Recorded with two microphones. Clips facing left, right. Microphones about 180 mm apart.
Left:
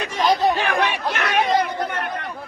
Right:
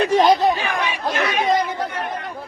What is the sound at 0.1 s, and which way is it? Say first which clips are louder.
Chatter: right 3 dB; 25° right (ahead or behind).